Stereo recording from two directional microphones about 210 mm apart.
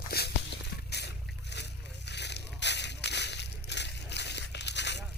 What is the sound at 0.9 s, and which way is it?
Boat, 50° left (ahead or behind).